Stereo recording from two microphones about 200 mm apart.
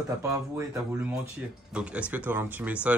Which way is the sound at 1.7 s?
5° right (ahead or behind).